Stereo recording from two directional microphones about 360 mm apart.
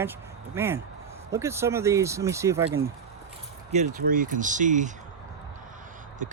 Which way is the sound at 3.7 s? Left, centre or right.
Right.